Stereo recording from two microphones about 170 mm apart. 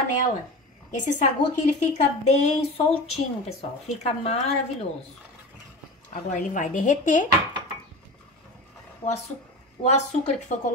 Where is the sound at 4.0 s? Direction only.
40° left (ahead or behind).